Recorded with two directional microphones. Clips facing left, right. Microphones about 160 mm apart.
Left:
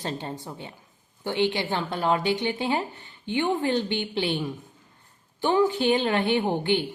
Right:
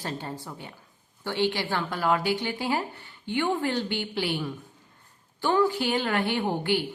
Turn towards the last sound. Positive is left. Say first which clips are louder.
# left 2 dB
turn(degrees=20)  # may be behind; listen again after turning